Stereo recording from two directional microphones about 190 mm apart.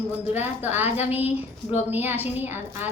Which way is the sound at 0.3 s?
10° right (ahead or behind).